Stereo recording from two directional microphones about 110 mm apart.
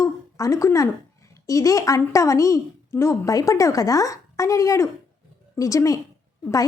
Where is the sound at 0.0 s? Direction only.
30° left (ahead or behind).